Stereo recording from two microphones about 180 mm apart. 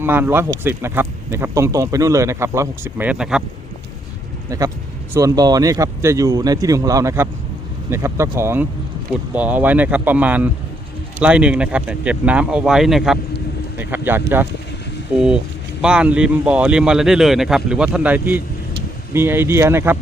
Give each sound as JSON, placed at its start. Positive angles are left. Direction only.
{"t": 0.0, "sound": "speech", "side_deg": -10}
{"t": 4.4, "sound": "speech", "side_deg": -20}
{"t": 15.8, "sound": "speech", "side_deg": -5}